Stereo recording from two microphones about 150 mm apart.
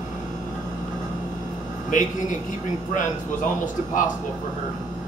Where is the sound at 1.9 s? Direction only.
55° left (ahead or behind).